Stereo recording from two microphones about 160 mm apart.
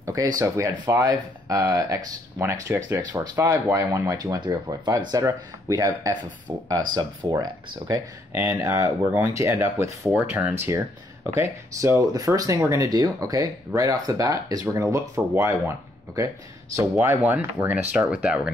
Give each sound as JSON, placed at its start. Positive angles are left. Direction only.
{"t": 0.0, "sound": "a sound", "side_deg": -20}
{"t": 0.4, "sound": "speech", "side_deg": -20}
{"t": 10.1, "sound": "speech", "side_deg": -5}
{"t": 11.3, "sound": "speech", "side_deg": -15}